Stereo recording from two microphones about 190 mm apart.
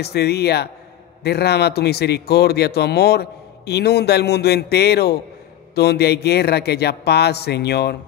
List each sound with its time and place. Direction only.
0.0 s a man's voice: 60° left (ahead or behind)